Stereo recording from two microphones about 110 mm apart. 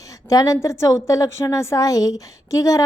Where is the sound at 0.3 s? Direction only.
30° left (ahead or behind).